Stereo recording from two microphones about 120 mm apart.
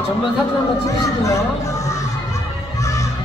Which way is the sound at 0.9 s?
25° left (ahead or behind).